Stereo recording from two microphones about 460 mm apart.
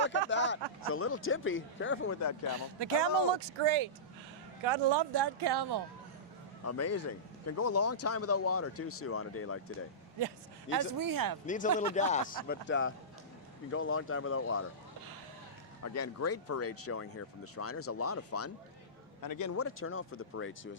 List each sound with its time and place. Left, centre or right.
0.0 s speech: left
2.6 s speech: right
6.7 s speech: left
10.2 s speech: right
11.4 s speech: centre
15.8 s speech: left
19.2 s speech: left